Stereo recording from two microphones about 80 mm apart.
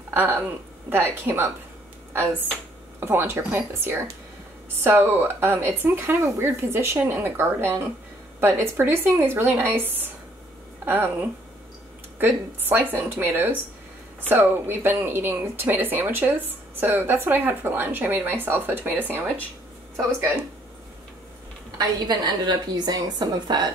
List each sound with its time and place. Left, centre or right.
0.1 s speech: right
3.0 s speech: right
21.7 s a woman's voice: right